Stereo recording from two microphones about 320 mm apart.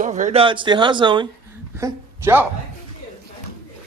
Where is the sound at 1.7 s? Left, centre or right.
Centre.